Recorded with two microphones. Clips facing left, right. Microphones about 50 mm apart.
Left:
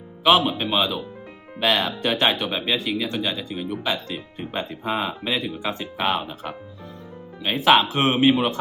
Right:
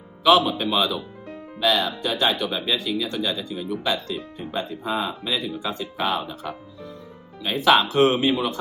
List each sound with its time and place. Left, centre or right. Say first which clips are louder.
0.3 s speech: right 1 dB; left
1.5 s speech: even; left